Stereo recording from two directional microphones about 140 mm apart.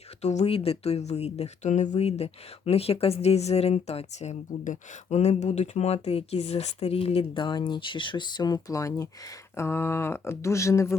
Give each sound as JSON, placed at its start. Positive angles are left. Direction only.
{"t": 0.2, "sound": "speech", "side_deg": 55}